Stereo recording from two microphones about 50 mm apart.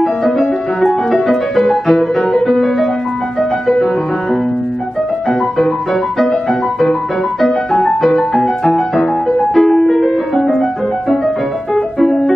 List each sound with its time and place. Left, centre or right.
0.0 s music: centre
7.3 s music: centre